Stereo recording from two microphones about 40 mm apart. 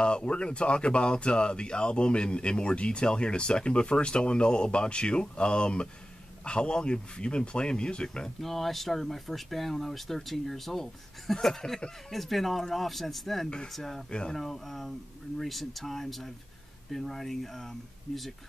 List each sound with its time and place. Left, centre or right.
0.0 s speech: left
8.4 s speech: centre